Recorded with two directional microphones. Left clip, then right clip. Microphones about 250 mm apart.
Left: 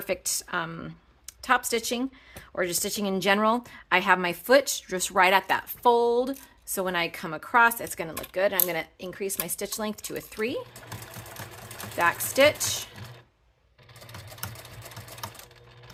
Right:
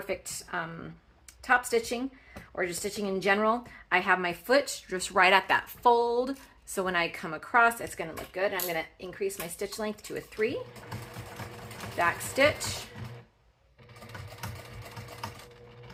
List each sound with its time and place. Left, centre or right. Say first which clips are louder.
0.1 s a woman's voice: left 6 dB; left
11.9 s a woman's voice: left 4 dB; left